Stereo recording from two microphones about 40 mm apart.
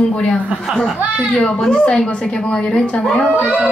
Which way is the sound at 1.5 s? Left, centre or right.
Centre.